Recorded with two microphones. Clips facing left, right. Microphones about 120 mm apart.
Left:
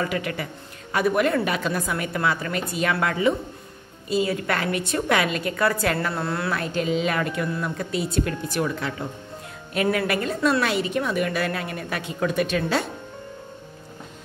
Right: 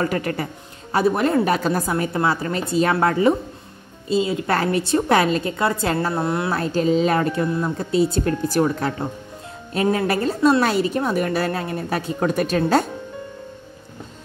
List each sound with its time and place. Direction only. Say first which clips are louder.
0.0 s a woman's voice: right 4 dB; 40° right (ahead or behind)
4.1 s a woman's voice: right 3 dB; 25° right (ahead or behind)
6.5 s a woman's voice: right 6 dB; 35° right (ahead or behind)
9.7 s a woman's voice: right 3 dB; 30° right (ahead or behind)